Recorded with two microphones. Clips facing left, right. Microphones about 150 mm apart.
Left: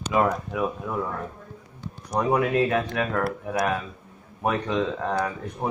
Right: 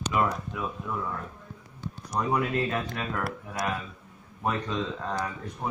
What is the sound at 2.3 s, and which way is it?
Speech, 60° left (ahead or behind).